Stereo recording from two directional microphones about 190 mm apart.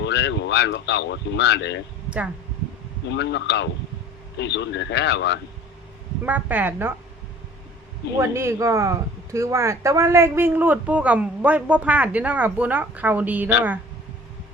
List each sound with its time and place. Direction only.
0.0 s speech: 65° left (ahead or behind)
2.0 s speech: 5° right (ahead or behind)
3.1 s speech: 65° left (ahead or behind)
6.2 s speech: 10° right (ahead or behind)
8.2 s speech: 15° right (ahead or behind)